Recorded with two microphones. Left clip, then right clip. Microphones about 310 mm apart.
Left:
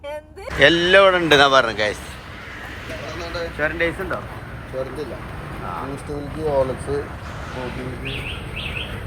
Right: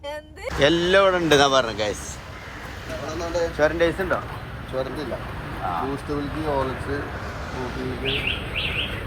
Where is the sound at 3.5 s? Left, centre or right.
Centre.